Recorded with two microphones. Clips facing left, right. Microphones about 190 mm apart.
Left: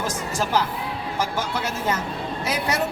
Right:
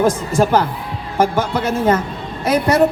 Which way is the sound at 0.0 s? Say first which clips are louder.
Right 11 dB; 55° right (ahead or behind).